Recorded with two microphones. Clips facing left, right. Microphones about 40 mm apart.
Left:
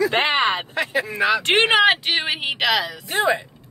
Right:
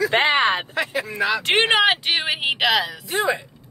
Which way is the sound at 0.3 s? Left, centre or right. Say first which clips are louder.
Right 1 dB; right.